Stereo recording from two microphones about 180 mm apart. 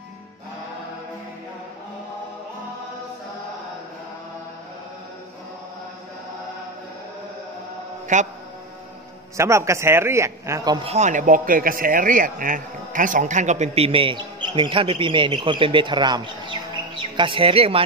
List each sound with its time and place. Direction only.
8.1 s a man's voice: 40° right (ahead or behind)
9.4 s a man's voice: 15° right (ahead or behind)
10.9 s a man's voice: 40° right (ahead or behind)